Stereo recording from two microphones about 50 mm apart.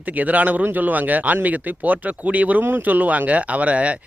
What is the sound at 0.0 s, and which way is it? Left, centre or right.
Speech, right.